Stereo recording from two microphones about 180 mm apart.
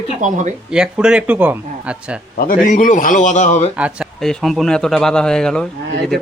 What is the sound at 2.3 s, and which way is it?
A man's voice, 50° left (ahead or behind).